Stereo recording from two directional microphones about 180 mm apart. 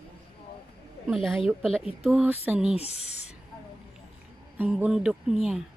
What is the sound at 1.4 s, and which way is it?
Speech, 5° left (ahead or behind).